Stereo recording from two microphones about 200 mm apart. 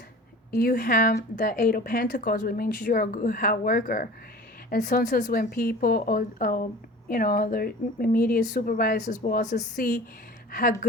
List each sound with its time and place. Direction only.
0.5 s a woman's voice: 50° left (ahead or behind)